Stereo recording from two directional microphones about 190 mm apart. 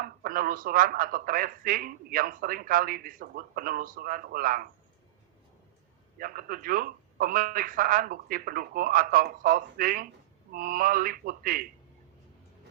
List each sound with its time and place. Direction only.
0.0 s speech: 50° right (ahead or behind)
6.1 s speech: 50° right (ahead or behind)